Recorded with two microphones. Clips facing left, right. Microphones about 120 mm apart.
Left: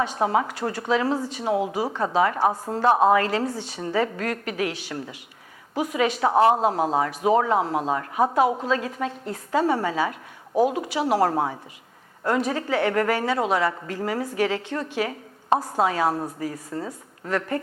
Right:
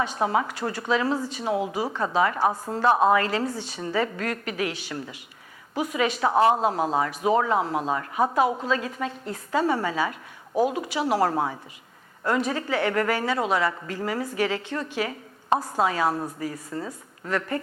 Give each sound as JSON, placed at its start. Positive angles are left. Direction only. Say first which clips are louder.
{"t": 0.0, "sound": "speech", "louder": "left 2 dB", "side_deg": 45}
{"t": 1.9, "sound": "speech", "louder": "left 2 dB", "side_deg": 35}
{"t": 2.1, "sound": "speech", "louder": "left 2 dB", "side_deg": 45}
{"t": 10.7, "sound": "speech", "louder": "left 2 dB", "side_deg": 55}
{"t": 11.0, "sound": "speech", "louder": "left 2 dB", "side_deg": 40}
{"t": 15.8, "sound": "speech", "louder": "left 1 dB", "side_deg": 45}